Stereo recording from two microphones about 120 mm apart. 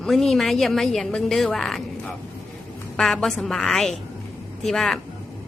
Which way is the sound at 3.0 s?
Centre (ahead or behind).